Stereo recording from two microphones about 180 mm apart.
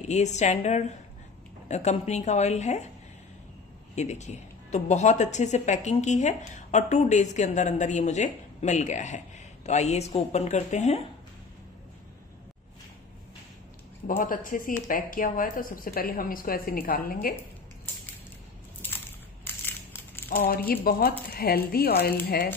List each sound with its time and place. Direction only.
0.1 s speech: 40° left (ahead or behind)
3.9 s speech: 40° left (ahead or behind)
14.0 s a woman's voice: 50° left (ahead or behind)
19.4 s crushing: 10° left (ahead or behind)
20.2 s speech: 55° left (ahead or behind)